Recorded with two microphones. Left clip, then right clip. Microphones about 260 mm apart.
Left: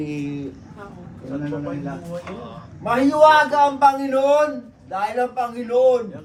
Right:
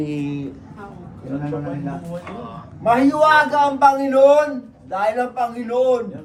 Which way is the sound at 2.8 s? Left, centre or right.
Centre.